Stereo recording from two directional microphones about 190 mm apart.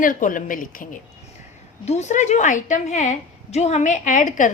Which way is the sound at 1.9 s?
35° left (ahead or behind).